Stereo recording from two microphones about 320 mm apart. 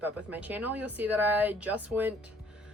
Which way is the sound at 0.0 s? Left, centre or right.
Centre.